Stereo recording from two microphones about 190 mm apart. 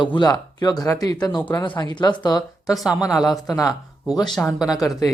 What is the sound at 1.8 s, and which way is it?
Speech, 25° left (ahead or behind).